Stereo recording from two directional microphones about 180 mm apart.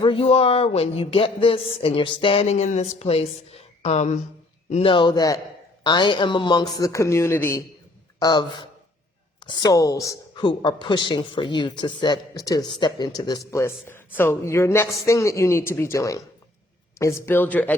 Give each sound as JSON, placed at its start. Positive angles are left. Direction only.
{"t": 0.0, "sound": "a man's voice", "side_deg": 30}